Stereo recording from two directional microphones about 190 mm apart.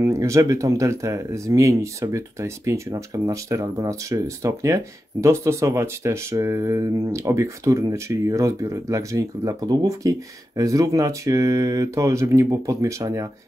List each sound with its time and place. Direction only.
0.0 s speech: 15° right (ahead or behind)